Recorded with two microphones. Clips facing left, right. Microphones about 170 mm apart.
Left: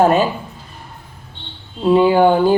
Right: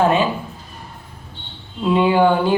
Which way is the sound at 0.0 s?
40° left (ahead or behind).